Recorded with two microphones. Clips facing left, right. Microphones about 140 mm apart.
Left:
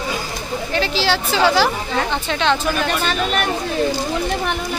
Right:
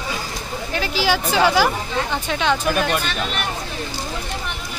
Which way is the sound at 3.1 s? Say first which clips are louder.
Left 5 dB; 45° left (ahead or behind).